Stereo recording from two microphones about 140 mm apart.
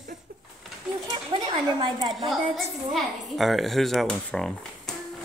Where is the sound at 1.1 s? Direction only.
35° right (ahead or behind).